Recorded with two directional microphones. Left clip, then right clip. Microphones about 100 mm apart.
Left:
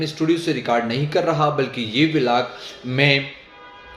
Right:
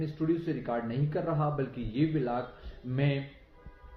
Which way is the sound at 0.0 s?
40° left (ahead or behind).